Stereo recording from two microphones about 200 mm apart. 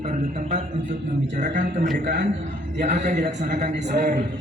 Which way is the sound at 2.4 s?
40° right (ahead or behind).